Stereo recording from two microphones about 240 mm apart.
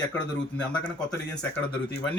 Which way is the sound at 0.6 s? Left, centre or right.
Centre.